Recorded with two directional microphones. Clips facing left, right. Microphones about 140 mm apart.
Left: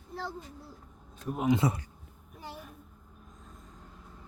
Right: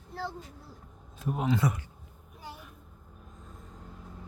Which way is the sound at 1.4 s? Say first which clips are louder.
Left 2 dB; 15° left (ahead or behind).